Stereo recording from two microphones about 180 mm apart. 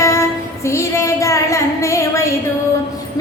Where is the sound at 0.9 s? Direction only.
15° left (ahead or behind).